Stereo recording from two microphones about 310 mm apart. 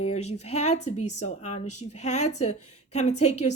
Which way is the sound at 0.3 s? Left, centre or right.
Left.